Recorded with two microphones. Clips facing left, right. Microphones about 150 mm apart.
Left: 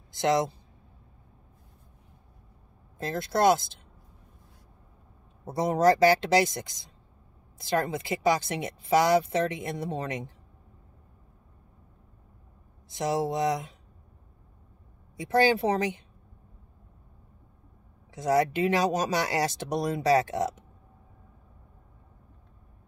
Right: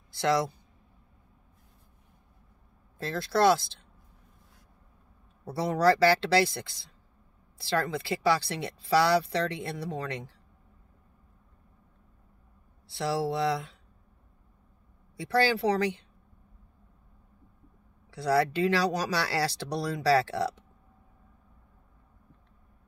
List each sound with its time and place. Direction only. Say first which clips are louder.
0.1 s speech: left 2 dB; 20° left (ahead or behind)
3.0 s speech: even; 20° left (ahead or behind)
5.4 s speech: left 2 dB; 20° left (ahead or behind)
12.9 s speech: left 1 dB; 20° left (ahead or behind)
15.1 s speech: left 3 dB; 20° left (ahead or behind)
18.1 s speech: left 1 dB; 20° left (ahead or behind)